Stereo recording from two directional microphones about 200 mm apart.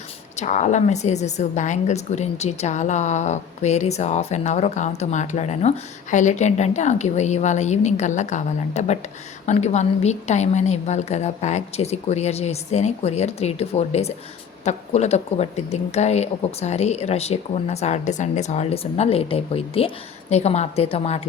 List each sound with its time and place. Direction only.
0.3 s a woman's voice: 35° left (ahead or behind)